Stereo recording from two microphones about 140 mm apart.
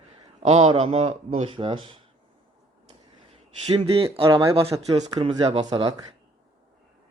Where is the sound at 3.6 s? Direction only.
40° right (ahead or behind).